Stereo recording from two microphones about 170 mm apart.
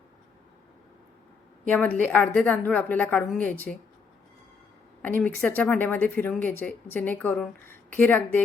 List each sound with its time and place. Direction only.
1.7 s speech: 10° left (ahead or behind)
5.0 s speech: 10° left (ahead or behind)